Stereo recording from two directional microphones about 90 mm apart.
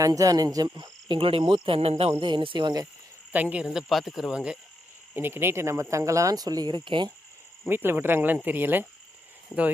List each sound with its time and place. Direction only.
0.0 s speech: 40° right (ahead or behind)
0.8 s cricket: 65° right (ahead or behind); by 2.0 s 90° right
2.2 s speech: 65° right (ahead or behind)
3.3 s speech: 15° right (ahead or behind)
5.1 s speech: 25° right (ahead or behind); by 7.1 s 65° right (ahead or behind)
7.7 s speech: 25° right (ahead or behind)